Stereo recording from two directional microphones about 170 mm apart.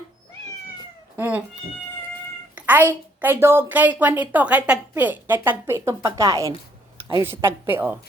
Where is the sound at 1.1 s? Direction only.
10° right (ahead or behind).